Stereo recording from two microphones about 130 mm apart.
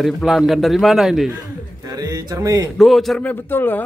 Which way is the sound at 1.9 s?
30° right (ahead or behind).